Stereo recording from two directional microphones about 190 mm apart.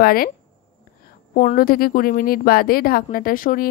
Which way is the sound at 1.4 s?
45° left (ahead or behind).